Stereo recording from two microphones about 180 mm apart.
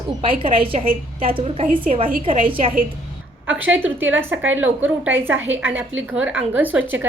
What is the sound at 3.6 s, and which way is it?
Speech, 10° right (ahead or behind).